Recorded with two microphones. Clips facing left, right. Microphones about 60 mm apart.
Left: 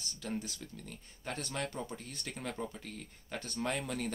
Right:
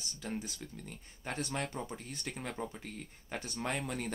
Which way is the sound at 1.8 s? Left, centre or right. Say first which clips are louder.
Right 1 dB; centre.